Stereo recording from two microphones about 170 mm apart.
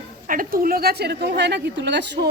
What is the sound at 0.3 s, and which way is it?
A woman's voice, 55° right (ahead or behind).